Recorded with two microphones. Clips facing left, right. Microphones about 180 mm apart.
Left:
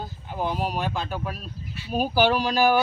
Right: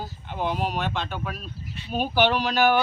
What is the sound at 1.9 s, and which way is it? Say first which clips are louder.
Speech: left 1 dB; 5° left (ahead or behind).